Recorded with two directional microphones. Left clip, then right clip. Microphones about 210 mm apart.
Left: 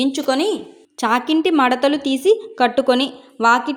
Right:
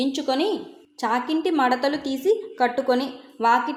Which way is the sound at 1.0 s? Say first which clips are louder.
Left 6 dB; 40° left (ahead or behind).